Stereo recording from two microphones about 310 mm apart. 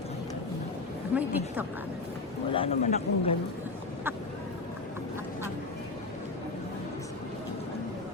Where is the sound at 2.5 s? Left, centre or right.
Centre.